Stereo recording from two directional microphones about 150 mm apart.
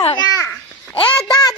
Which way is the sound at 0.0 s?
30° left (ahead or behind).